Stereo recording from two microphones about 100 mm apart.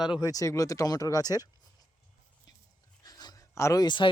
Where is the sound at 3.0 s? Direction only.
45° left (ahead or behind).